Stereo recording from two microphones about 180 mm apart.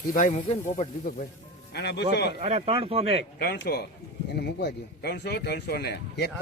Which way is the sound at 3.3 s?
60° left (ahead or behind).